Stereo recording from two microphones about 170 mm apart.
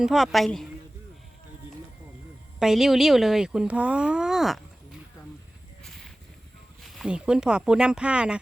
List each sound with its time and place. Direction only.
0.0 s speech: centre (ahead or behind)
2.6 s speech: 5° right (ahead or behind)
6.8 s speech: 5° right (ahead or behind)